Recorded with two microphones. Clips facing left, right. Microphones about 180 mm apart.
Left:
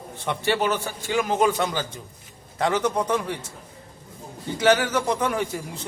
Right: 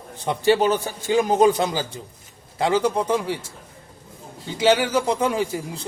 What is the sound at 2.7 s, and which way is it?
Speech, 30° right (ahead or behind).